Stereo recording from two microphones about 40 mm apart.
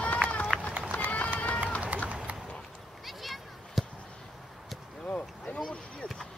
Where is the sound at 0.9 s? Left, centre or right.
Left.